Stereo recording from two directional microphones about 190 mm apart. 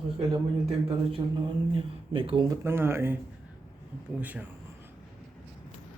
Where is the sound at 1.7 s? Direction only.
30° right (ahead or behind).